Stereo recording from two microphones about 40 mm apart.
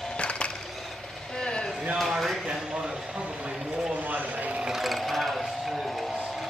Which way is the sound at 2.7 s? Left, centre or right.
Centre.